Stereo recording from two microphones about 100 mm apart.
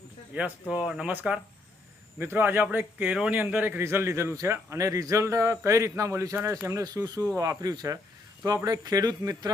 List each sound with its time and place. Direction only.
0.7 s speech: 5° right (ahead or behind)
2.1 s a man's voice: 20° right (ahead or behind); by 9.5 s 35° right (ahead or behind)